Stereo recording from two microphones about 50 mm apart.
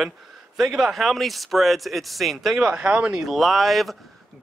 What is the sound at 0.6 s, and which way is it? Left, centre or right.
Speech, centre.